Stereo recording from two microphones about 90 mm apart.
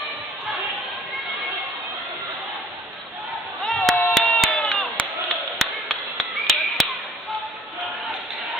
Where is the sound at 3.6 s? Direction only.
15° left (ahead or behind).